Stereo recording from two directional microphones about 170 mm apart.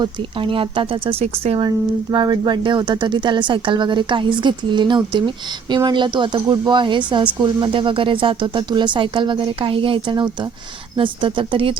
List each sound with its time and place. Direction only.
0.0 s speech: 30° right (ahead or behind)